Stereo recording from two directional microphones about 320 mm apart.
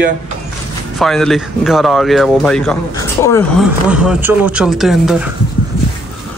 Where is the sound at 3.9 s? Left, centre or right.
Centre.